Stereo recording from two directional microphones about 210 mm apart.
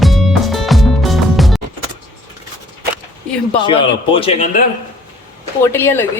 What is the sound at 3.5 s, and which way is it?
A man's voice, 20° left (ahead or behind).